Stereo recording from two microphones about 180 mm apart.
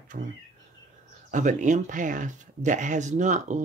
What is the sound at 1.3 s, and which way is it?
Speech, 45° right (ahead or behind).